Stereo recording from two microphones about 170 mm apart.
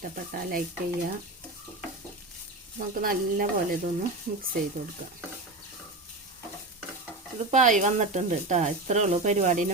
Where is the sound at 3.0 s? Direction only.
55° right (ahead or behind).